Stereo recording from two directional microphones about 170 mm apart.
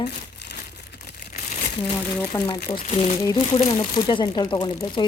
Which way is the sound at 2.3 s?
20° left (ahead or behind).